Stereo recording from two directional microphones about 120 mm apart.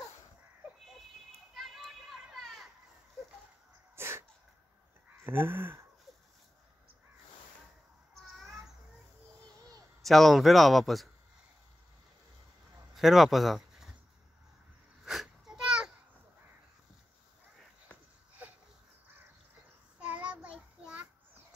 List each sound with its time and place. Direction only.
1.5 s children playing: centre (ahead or behind)
3.9 s sneeze: 20° right (ahead or behind)
5.1 s speech: 20° right (ahead or behind)
8.1 s a sound: centre (ahead or behind)
10.0 s speech: centre (ahead or behind)
12.9 s speech: centre (ahead or behind)
15.0 s a sound: 5° right (ahead or behind)
20.0 s child singing: 10° right (ahead or behind)